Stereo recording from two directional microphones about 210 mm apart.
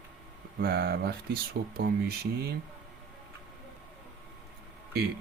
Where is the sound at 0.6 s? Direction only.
50° right (ahead or behind).